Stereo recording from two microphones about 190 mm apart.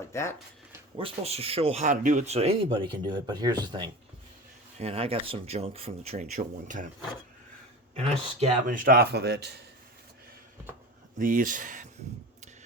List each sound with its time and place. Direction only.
0.1 s speech: 15° left (ahead or behind)
0.9 s speech: 30° right (ahead or behind)
7.9 s speech: 35° right (ahead or behind)
8.6 s speech: 45° right (ahead or behind)
11.2 s speech: 45° right (ahead or behind)